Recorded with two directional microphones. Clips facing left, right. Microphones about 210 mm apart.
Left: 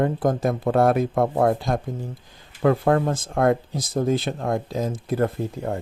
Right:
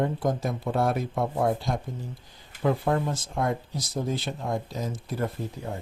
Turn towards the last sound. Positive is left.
turn(degrees=55)  # may be behind; listen again after turning